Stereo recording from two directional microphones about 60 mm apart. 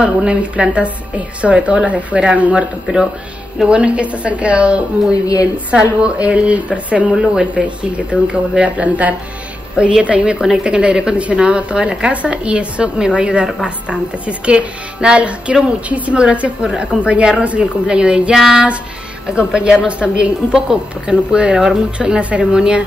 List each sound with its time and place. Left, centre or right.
0.0 s a woman's voice: centre
5.1 s a woman's voice: left
5.4 s a woman's voice: centre